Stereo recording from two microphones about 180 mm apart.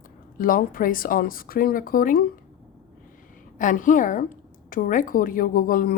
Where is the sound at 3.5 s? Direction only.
45° left (ahead or behind).